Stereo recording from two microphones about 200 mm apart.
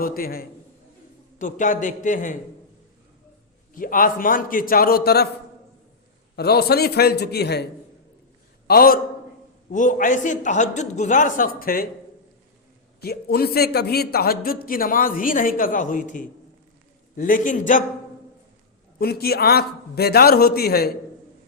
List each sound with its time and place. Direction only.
0.0 s a man's voice: 50° left (ahead or behind)
3.8 s a man's voice: 45° left (ahead or behind)
6.3 s a man's voice: 55° left (ahead or behind)
13.0 s a man's voice: 50° left (ahead or behind)
18.9 s a man's voice: 50° left (ahead or behind)